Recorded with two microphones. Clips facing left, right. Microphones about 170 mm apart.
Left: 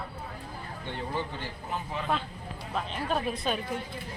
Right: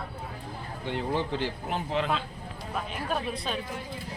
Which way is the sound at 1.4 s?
75° right (ahead or behind).